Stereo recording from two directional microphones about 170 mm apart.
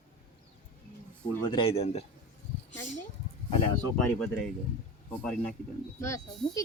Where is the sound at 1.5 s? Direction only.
30° left (ahead or behind).